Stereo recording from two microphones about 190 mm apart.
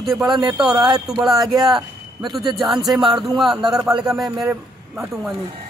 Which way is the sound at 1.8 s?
20° right (ahead or behind).